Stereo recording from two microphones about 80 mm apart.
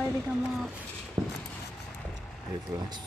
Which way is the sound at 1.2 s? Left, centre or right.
Right.